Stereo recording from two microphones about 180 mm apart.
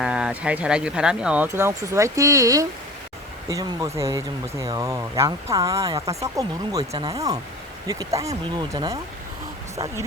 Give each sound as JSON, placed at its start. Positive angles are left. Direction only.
{"t": 0.0, "sound": "speech", "side_deg": -5}